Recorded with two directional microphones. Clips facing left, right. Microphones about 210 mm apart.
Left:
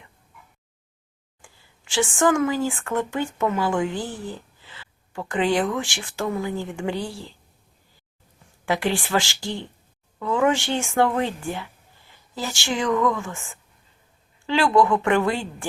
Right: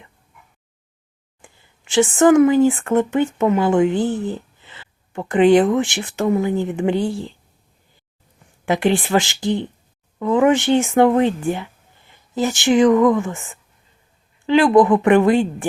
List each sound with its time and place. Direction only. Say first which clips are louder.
1.9 s speech: right 8 dB; 20° right (ahead or behind)
8.6 s speech: right 6 dB; 20° right (ahead or behind)
14.4 s speech: right 6 dB; 20° right (ahead or behind)